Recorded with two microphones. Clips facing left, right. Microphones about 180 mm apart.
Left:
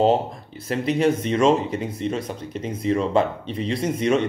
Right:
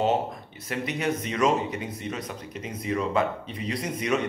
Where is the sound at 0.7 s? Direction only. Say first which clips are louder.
Left 8 dB; 30° left (ahead or behind).